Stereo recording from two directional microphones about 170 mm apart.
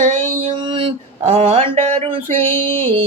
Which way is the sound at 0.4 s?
30° right (ahead or behind).